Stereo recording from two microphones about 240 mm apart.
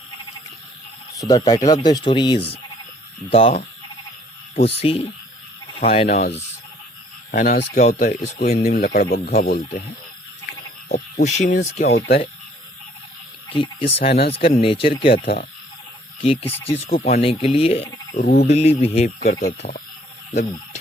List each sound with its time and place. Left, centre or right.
1.3 s speech: centre
4.8 s speech: left
7.3 s speech: left
10.8 s speech: left
13.5 s speech: left
18.2 s speech: left
18.4 s speech: left